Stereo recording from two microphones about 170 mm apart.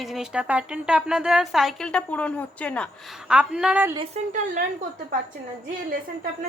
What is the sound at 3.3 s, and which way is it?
Speech, 5° right (ahead or behind).